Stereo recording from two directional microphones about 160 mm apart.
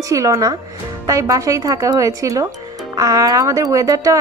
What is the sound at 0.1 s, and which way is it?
Speech, 20° right (ahead or behind).